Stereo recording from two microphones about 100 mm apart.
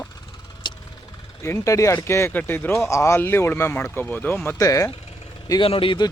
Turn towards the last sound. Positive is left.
turn(degrees=60)  # may be behind; listen again after turning